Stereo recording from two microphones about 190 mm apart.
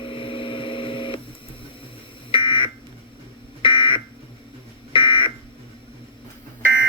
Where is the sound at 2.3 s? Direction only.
25° left (ahead or behind).